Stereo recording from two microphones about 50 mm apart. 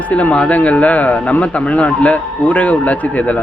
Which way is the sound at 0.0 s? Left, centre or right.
Left.